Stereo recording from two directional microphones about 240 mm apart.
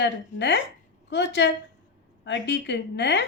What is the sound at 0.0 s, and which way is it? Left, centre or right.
A woman's voice, left.